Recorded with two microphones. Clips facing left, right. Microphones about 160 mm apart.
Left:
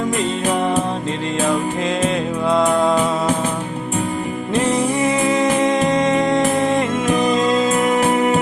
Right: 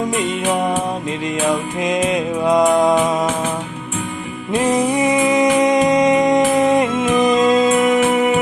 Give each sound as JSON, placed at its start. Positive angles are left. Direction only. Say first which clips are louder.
{"t": 1.8, "sound": "music", "louder": "right 1 dB", "side_deg": -15}
{"t": 4.9, "sound": "music", "louder": "right 2 dB", "side_deg": -15}
{"t": 7.9, "sound": "music", "louder": "right 1 dB", "side_deg": 35}